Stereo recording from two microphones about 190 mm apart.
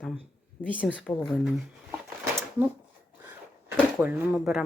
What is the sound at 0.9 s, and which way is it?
Speech, 5° left (ahead or behind).